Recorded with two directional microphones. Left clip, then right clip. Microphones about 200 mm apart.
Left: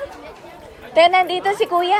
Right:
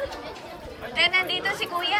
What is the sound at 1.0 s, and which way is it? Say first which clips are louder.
A woman's voice: left 9 dB; 20° left (ahead or behind).